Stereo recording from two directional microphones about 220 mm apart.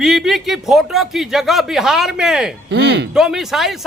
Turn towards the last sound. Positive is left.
turn(degrees=0)  # may be behind; listen again after turning